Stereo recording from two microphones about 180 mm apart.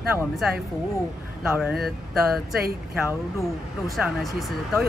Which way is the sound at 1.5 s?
Centre (ahead or behind).